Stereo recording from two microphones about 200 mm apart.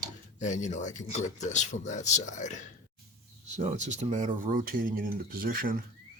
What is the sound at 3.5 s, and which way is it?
Speech, 35° right (ahead or behind).